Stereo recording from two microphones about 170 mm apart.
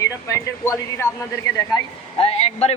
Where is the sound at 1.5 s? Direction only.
20° left (ahead or behind).